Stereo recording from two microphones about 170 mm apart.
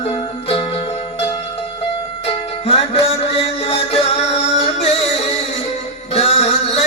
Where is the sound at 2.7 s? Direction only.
35° left (ahead or behind).